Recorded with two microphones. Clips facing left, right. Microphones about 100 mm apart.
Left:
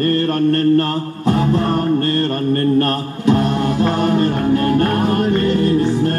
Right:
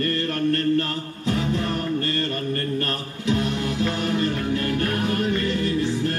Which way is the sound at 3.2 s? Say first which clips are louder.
Left 8 dB; 50° left (ahead or behind).